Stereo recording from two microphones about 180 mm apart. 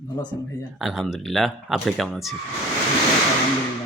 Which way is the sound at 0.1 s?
25° left (ahead or behind).